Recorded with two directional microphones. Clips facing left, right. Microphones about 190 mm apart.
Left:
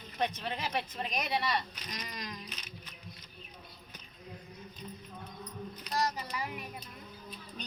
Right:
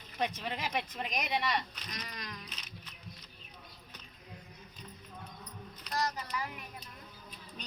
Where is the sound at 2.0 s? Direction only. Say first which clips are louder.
Left 2 dB; 20° left (ahead or behind).